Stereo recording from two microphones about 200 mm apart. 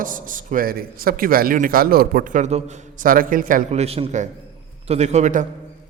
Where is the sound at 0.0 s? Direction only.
40° right (ahead or behind).